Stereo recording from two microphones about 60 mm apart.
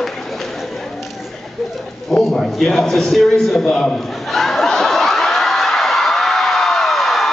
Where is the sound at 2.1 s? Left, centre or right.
Centre.